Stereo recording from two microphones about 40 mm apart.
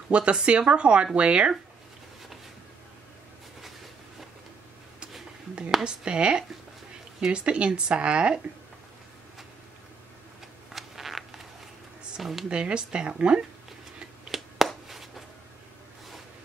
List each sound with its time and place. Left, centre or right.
0.1 s speech: right
5.9 s speech: right
10.7 s a sound: centre
12.2 s speech: centre
12.4 s speech: right
14.3 s a sound: centre